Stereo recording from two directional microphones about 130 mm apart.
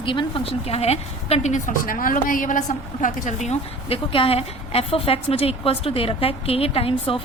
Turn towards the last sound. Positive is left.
turn(degrees=45)  # may be behind; listen again after turning